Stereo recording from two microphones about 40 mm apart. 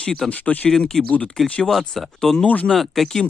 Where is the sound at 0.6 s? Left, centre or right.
Centre.